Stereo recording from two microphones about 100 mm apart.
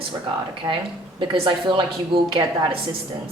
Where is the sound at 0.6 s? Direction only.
50° right (ahead or behind).